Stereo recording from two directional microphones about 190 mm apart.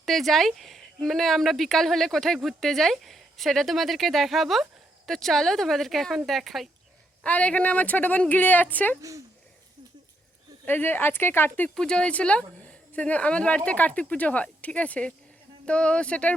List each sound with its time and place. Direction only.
0.0 s speech: centre (ahead or behind)
9.0 s speech: 15° right (ahead or behind)
10.7 s speech: 10° left (ahead or behind)